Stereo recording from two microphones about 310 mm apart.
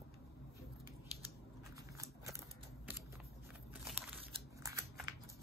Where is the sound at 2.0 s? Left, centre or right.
Centre.